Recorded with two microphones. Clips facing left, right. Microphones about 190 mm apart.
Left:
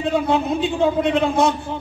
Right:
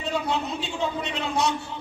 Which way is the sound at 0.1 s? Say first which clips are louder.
Left 7 dB; 55° left (ahead or behind).